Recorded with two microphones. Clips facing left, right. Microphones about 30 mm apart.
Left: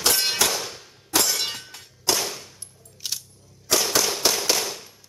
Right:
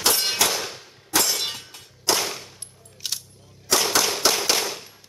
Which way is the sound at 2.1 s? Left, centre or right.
Centre.